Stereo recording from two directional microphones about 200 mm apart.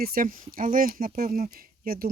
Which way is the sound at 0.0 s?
45° right (ahead or behind).